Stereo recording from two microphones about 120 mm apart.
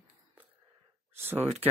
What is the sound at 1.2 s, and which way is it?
Speech, 20° right (ahead or behind).